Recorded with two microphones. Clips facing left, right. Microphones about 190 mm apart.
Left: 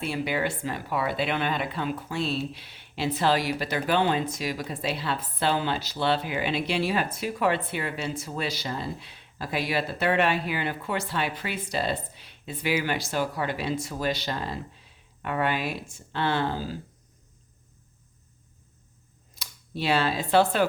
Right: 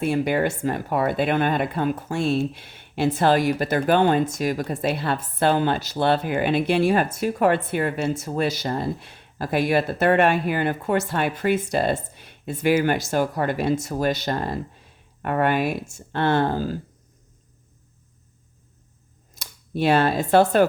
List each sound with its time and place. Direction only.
0.0 s speech: 50° right (ahead or behind)
19.4 s speech: 50° right (ahead or behind)